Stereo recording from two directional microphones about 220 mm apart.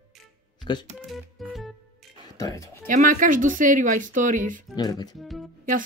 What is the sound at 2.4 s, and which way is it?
Speech, 15° left (ahead or behind).